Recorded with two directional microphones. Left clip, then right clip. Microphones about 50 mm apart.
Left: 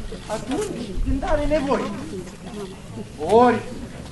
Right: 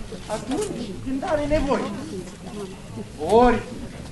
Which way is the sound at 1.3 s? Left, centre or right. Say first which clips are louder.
Left 1 dB; centre.